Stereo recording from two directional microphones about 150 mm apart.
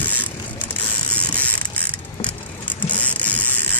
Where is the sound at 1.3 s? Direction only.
10° left (ahead or behind).